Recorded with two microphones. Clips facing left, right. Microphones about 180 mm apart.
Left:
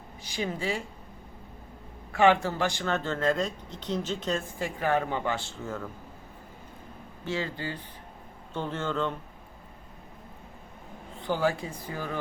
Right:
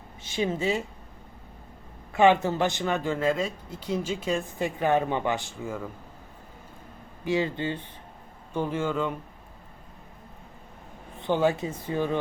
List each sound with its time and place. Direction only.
0.2 s speech: 25° right (ahead or behind)
2.1 s speech: 20° right (ahead or behind)
4.5 s speech: 20° right (ahead or behind)
7.3 s speech: 20° right (ahead or behind)
8.5 s speech: 10° right (ahead or behind)
11.2 s speech: 20° right (ahead or behind)